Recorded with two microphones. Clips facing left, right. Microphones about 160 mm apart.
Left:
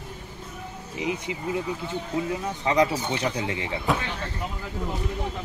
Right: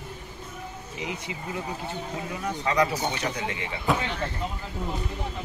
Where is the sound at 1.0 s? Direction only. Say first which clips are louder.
Left 6 dB; 20° left (ahead or behind).